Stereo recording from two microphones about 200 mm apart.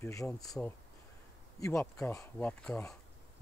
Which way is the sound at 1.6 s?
15° left (ahead or behind).